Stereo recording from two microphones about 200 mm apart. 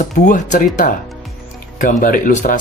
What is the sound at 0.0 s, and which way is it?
Speech, 40° left (ahead or behind).